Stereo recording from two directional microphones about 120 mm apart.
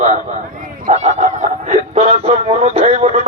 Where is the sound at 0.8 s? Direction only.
70° right (ahead or behind).